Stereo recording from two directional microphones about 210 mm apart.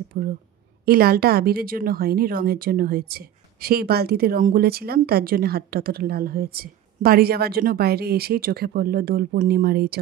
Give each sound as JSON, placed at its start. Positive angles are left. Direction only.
{"t": 0.1, "sound": "a woman's voice", "side_deg": -40}